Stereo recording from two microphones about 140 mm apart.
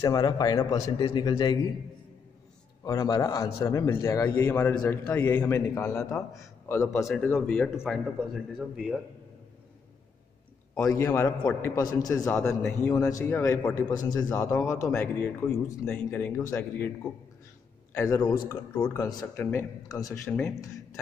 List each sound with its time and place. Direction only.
0.0 s a man's voice: 30° left (ahead or behind)
2.8 s a man's voice: 25° left (ahead or behind)
7.3 s speech: 5° left (ahead or behind)
10.8 s a man's voice: 20° left (ahead or behind)
12.3 s a man's voice: 10° left (ahead or behind)
16.4 s a man's voice: 20° left (ahead or behind)
17.9 s a man's voice: 20° left (ahead or behind)
19.3 s a man's voice: 15° left (ahead or behind)
19.9 s a man's voice: 25° left (ahead or behind)
20.2 s a man's voice: 15° left (ahead or behind)